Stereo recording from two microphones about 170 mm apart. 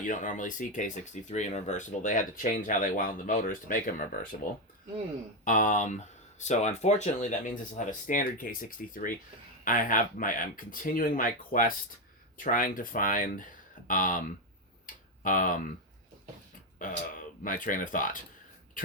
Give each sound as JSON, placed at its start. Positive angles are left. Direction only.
{"t": 0.0, "sound": "speech", "side_deg": 50}
{"t": 5.5, "sound": "speech", "side_deg": 50}
{"t": 14.8, "sound": "tick-tock", "side_deg": 50}
{"t": 16.7, "sound": "speech", "side_deg": 50}